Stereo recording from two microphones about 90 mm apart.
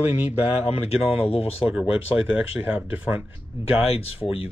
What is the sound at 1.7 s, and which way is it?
Speech, 15° right (ahead or behind).